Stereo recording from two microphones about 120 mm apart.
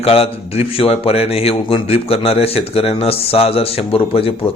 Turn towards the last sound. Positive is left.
turn(degrees=50)  # may be behind; listen again after turning